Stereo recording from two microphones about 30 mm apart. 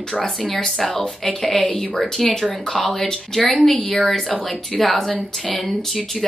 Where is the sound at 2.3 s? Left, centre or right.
Centre.